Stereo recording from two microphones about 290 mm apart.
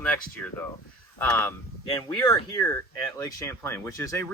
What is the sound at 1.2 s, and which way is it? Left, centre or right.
Speech, centre.